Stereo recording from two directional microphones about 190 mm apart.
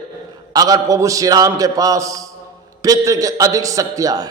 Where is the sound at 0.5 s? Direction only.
20° right (ahead or behind).